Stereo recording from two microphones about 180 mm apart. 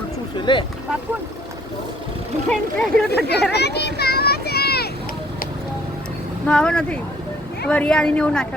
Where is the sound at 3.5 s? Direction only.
70° left (ahead or behind).